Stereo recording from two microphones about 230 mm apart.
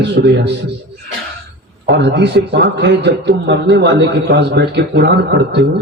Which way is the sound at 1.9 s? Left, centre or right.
Right.